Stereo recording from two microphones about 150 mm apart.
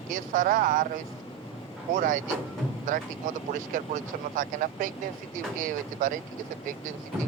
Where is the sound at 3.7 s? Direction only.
65° right (ahead or behind).